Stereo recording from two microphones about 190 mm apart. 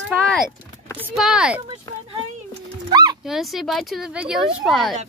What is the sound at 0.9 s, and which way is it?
Speech, 5° right (ahead or behind).